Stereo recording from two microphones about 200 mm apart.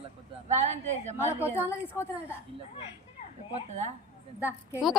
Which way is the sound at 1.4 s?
10° right (ahead or behind).